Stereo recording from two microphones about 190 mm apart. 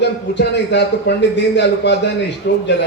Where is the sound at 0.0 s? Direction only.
65° left (ahead or behind).